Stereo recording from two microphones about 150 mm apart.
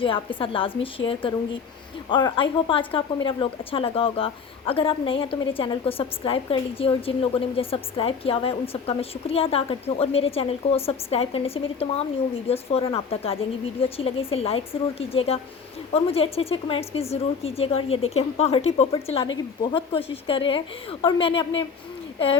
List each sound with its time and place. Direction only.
0.0 s a woman's voice: 35° left (ahead or behind)